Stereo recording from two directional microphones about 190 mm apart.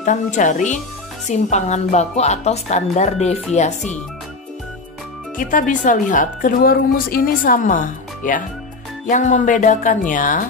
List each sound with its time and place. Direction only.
0.0 s speech: 40° left (ahead or behind)
5.4 s a woman's voice: 45° left (ahead or behind)